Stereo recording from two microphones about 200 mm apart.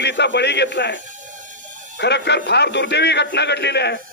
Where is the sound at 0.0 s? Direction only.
60° left (ahead or behind).